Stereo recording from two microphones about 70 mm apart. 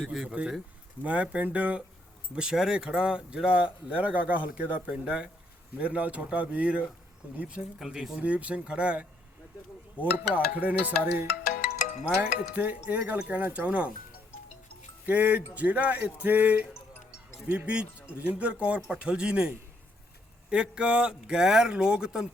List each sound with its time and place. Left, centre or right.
0.0 s speech: centre
0.3 s speech: centre
8.2 s speech: centre
15.0 s speech: right
17.7 s speech: centre